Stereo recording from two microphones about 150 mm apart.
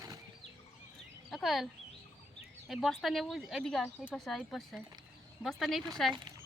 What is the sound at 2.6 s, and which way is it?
Speech, centre (ahead or behind).